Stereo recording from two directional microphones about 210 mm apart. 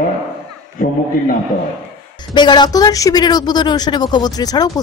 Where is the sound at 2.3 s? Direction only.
20° left (ahead or behind).